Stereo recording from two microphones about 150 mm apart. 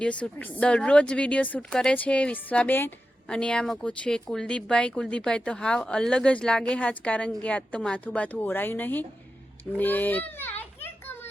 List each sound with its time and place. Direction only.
0.0 s speech: 10° left (ahead or behind)
10.8 s children playing: 15° left (ahead or behind)